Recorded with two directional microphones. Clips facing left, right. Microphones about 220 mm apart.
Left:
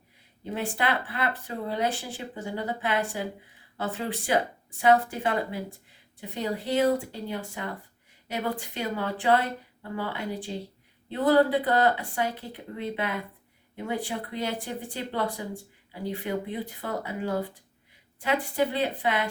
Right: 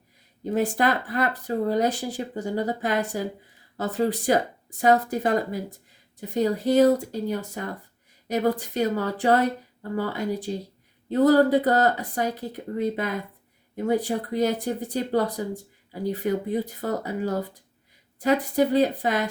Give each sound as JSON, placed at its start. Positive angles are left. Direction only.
{"t": 0.4, "sound": "speech", "side_deg": -40}